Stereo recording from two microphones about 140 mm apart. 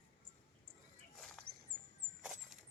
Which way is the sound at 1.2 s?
5° left (ahead or behind).